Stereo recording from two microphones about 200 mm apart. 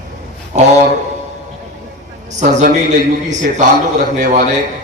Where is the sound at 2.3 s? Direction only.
35° right (ahead or behind).